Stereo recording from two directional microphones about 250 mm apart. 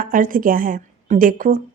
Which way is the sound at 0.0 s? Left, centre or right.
Right.